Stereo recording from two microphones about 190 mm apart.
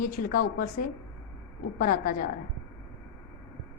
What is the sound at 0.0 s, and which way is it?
A woman's voice, 45° left (ahead or behind).